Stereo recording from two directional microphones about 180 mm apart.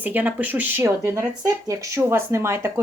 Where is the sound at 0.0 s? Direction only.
10° right (ahead or behind).